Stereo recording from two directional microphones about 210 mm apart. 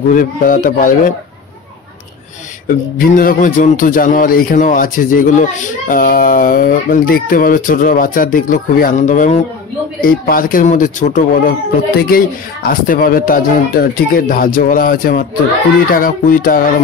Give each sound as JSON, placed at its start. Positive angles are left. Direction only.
{"t": 0.1, "sound": "speech", "side_deg": 40}
{"t": 3.0, "sound": "speech", "side_deg": 40}